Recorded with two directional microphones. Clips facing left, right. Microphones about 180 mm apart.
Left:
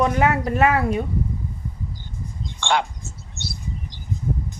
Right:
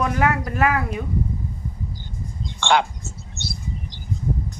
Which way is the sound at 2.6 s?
80° right.